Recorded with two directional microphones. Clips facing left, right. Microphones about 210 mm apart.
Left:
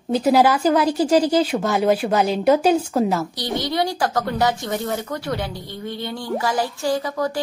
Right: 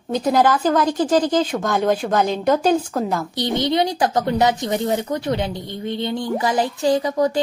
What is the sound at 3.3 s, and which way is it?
A woman's voice, 20° right (ahead or behind).